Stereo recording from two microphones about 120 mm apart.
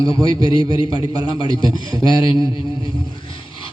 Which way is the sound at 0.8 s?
40° left (ahead or behind).